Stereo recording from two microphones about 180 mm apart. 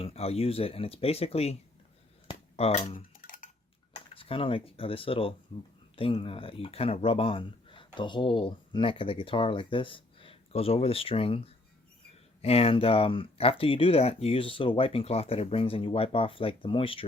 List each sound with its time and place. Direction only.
0.0 s speech: 35° left (ahead or behind)
2.2 s a sound: 35° left (ahead or behind)
3.2 s typing: 50° left (ahead or behind)
3.9 s speech: 30° left (ahead or behind)